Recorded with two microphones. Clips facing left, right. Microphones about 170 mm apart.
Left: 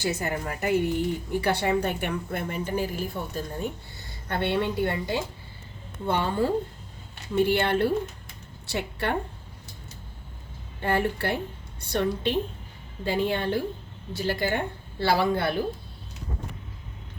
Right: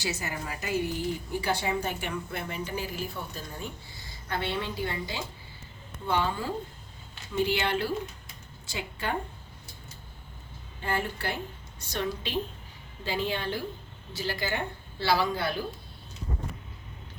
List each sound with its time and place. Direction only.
0.0 s a woman's voice: 55° left (ahead or behind)
8.6 s a woman's voice: 65° left (ahead or behind)
10.8 s a woman's voice: 60° left (ahead or behind)